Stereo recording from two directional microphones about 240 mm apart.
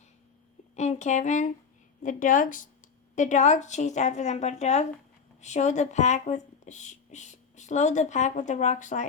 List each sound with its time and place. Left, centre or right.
0.8 s speech: left